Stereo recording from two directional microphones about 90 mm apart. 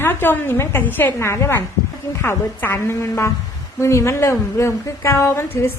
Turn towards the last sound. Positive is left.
turn(degrees=30)  # may be behind; listen again after turning